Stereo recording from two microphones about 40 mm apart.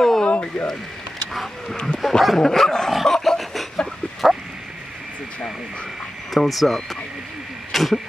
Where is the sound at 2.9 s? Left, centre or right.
Centre.